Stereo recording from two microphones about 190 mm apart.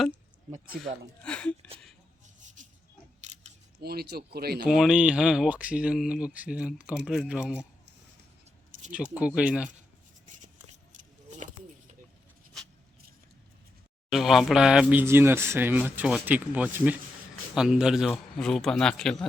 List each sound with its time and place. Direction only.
0.5 s speech: 50° right (ahead or behind)
1.2 s speech: 5° left (ahead or behind)
2.6 s pig: 40° right (ahead or behind)
3.3 s a sound: 40° right (ahead or behind)
3.8 s speech: 55° right (ahead or behind)
4.6 s speech: centre (ahead or behind)
9.1 s speech: 5° right (ahead or behind)
10.2 s a sound: 40° right (ahead or behind)
14.1 s speech: centre (ahead or behind)